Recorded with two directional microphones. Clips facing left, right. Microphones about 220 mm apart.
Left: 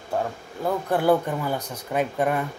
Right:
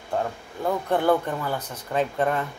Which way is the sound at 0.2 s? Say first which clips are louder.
Even; 5° left (ahead or behind).